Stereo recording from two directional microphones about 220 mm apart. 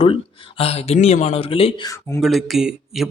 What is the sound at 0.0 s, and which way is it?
Speech, 25° left (ahead or behind).